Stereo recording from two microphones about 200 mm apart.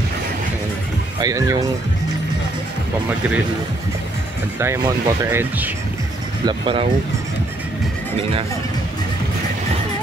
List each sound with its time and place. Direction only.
1.2 s speech: 15° right (ahead or behind)
4.6 s speech: 10° right (ahead or behind)
6.4 s speech: 25° right (ahead or behind)